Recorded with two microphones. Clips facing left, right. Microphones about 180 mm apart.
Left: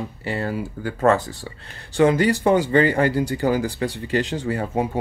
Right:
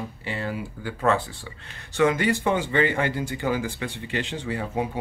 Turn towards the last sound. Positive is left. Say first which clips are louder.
# left 4 dB
turn(degrees=45)  # may be behind; listen again after turning